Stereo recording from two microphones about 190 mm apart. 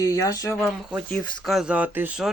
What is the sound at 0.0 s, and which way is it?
Speech, 20° left (ahead or behind).